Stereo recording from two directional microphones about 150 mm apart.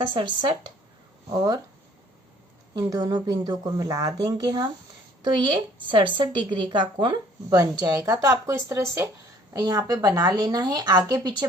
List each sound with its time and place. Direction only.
0.1 s a woman's voice: 30° right (ahead or behind)
2.7 s a woman's voice: 25° right (ahead or behind)